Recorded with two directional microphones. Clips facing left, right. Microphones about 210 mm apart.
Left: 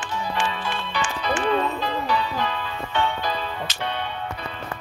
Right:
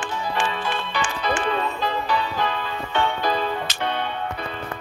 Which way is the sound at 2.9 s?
50° right (ahead or behind).